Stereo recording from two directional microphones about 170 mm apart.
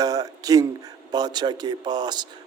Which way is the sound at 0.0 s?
20° right (ahead or behind).